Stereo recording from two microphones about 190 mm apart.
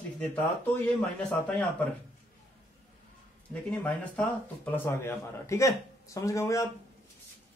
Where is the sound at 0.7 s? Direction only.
10° left (ahead or behind).